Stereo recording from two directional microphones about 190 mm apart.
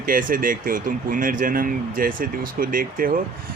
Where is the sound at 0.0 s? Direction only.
45° right (ahead or behind).